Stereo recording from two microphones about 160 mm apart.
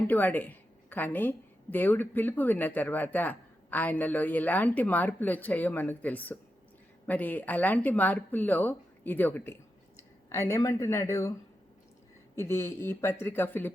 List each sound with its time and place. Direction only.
0.1 s a woman's voice: 10° left (ahead or behind)
12.4 s a woman's voice: 15° left (ahead or behind)